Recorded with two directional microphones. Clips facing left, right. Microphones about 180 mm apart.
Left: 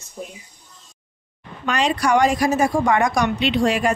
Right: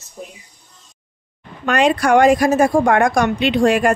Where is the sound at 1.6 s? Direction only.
55° right (ahead or behind).